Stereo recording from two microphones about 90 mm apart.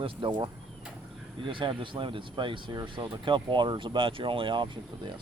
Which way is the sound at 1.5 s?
70° right (ahead or behind).